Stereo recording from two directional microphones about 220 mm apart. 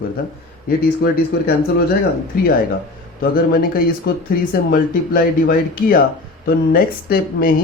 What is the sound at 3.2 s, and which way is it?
Speech, 40° left (ahead or behind).